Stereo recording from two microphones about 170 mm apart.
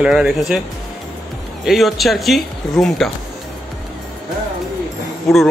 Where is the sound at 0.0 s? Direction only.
5° right (ahead or behind).